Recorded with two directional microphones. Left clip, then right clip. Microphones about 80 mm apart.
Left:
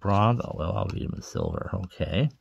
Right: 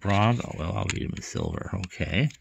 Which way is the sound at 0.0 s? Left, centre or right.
Centre.